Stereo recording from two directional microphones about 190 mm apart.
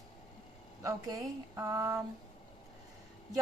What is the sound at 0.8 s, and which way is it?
A woman's voice, 15° right (ahead or behind).